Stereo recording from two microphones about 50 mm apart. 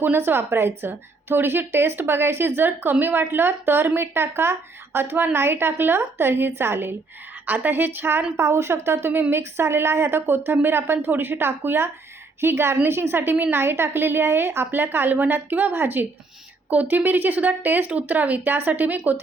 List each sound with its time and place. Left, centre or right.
0.0 s a woman's voice: right
7.4 s a woman's voice: right
8.4 s a woman's voice: right